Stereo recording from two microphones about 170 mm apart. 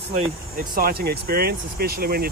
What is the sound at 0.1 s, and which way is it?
Speech, 55° right (ahead or behind).